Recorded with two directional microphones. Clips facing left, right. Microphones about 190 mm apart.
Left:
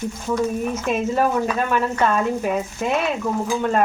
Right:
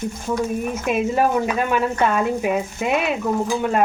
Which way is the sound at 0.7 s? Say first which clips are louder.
Right 1 dB; 10° right (ahead or behind).